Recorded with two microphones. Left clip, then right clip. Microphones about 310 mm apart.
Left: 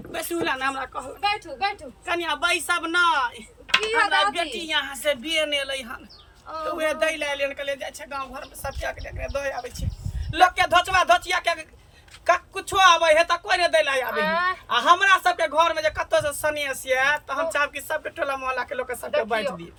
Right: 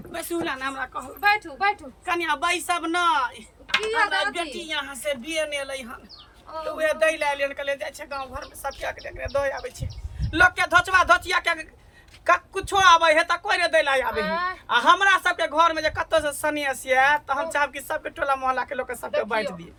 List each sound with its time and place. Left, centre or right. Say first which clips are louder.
0.1 s a man's voice: left 2 dB; centre
14.1 s speech: left 3 dB; centre
14.7 s a man's voice: even; centre